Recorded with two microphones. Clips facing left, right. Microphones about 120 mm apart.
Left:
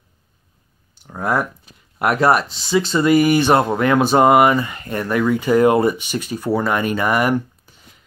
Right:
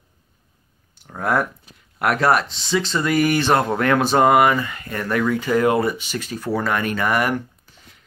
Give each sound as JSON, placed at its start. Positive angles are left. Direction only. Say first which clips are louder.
{"t": 1.0, "sound": "speech", "louder": "left 1 dB", "side_deg": 5}